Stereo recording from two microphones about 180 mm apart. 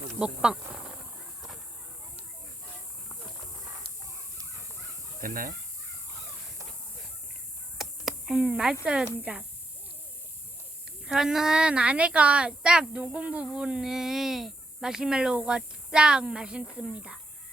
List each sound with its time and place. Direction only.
0.2 s speech: 5° right (ahead or behind)
5.2 s speech: 50° right (ahead or behind)
7.8 s speech: centre (ahead or behind)
11.0 s a woman's voice: 5° right (ahead or behind)